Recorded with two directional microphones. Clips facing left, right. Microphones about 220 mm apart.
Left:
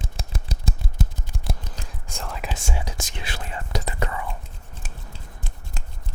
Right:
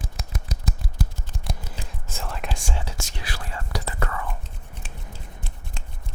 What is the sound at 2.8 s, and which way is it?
Whispering, 15° left (ahead or behind).